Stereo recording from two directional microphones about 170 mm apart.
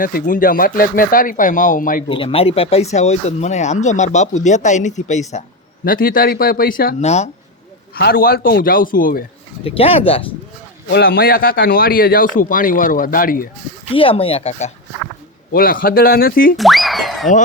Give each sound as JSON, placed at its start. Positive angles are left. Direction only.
{"t": 0.0, "sound": "speech", "side_deg": 55}
{"t": 2.0, "sound": "speech", "side_deg": 30}
{"t": 5.8, "sound": "a man's voice", "side_deg": 55}
{"t": 7.0, "sound": "speech", "side_deg": 40}
{"t": 7.9, "sound": "a man's voice", "side_deg": 65}
{"t": 9.6, "sound": "speech", "side_deg": 35}
{"t": 10.8, "sound": "a man's voice", "side_deg": 60}
{"t": 13.9, "sound": "speech", "side_deg": 30}
{"t": 15.5, "sound": "a man's voice", "side_deg": 60}
{"t": 16.6, "sound": "speech", "side_deg": 0}